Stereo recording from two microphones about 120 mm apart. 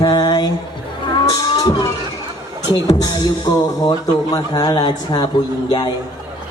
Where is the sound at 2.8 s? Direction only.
30° left (ahead or behind).